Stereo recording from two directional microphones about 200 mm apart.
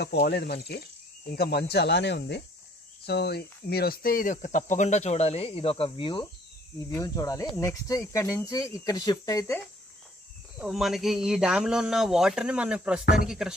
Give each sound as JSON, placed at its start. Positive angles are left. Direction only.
{"t": 0.0, "sound": "speech", "side_deg": 55}
{"t": 10.6, "sound": "speech", "side_deg": 0}